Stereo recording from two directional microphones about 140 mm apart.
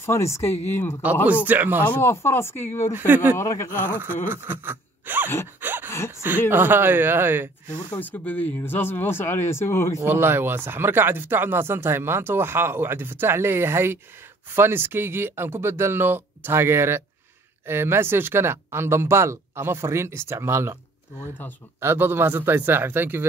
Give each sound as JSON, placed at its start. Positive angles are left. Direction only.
{"t": 0.0, "sound": "speech", "side_deg": 20}
{"t": 1.2, "sound": "speech", "side_deg": -10}
{"t": 1.9, "sound": "speech", "side_deg": 15}
{"t": 2.9, "sound": "speech", "side_deg": -15}
{"t": 3.3, "sound": "speech", "side_deg": 20}
{"t": 3.9, "sound": "speech", "side_deg": -15}
{"t": 4.3, "sound": "gasp", "side_deg": -15}
{"t": 5.6, "sound": "a sound", "side_deg": -15}
{"t": 5.9, "sound": "a sound", "side_deg": 20}
{"t": 6.5, "sound": "speech", "side_deg": -15}
{"t": 8.0, "sound": "speech", "side_deg": 10}
{"t": 9.9, "sound": "speech", "side_deg": -15}
{"t": 21.7, "sound": "speech", "side_deg": -15}